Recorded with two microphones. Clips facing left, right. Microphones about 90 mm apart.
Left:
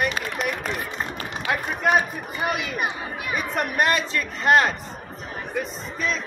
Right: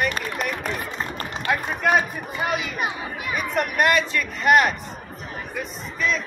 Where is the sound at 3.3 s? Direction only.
35° left (ahead or behind).